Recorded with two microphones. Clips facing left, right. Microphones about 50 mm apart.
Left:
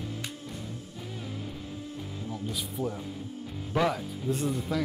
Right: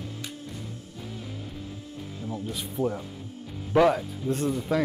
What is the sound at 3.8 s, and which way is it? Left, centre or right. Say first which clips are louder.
Speech: right 7 dB; centre.